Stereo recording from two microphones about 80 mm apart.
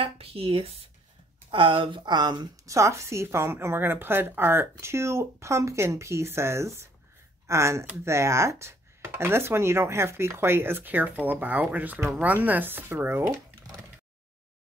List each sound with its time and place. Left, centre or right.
1.5 s speech: right
2.5 s a woman's voice: right
13.7 s a sound: right